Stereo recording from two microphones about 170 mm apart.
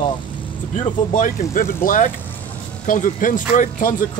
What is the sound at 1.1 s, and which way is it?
Speech, 50° left (ahead or behind).